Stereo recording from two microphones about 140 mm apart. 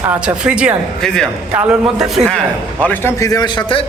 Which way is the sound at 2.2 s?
10° left (ahead or behind).